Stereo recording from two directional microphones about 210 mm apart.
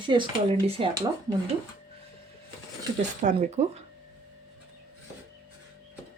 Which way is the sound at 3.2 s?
35° right (ahead or behind).